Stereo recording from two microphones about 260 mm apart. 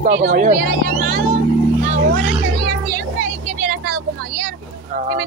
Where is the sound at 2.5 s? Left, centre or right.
Right.